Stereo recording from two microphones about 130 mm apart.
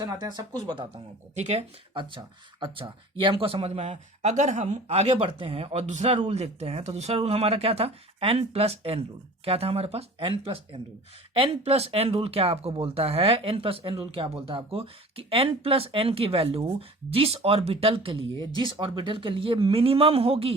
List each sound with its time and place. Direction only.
0.0 s speech: 30° right (ahead or behind)
1.4 s speech: 55° right (ahead or behind)
1.9 s speech: 40° right (ahead or behind)